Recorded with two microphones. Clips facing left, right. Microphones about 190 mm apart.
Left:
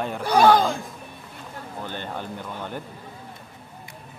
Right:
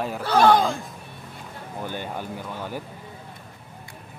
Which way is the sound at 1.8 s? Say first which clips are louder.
Right 2 dB; 10° right (ahead or behind).